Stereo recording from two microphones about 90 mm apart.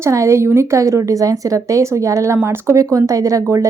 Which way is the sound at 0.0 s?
35° right (ahead or behind).